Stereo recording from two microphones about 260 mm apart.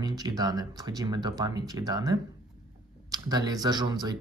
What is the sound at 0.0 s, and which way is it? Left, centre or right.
Speech, centre.